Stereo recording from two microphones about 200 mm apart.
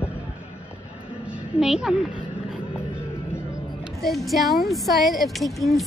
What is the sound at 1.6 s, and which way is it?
Speech, centre (ahead or behind).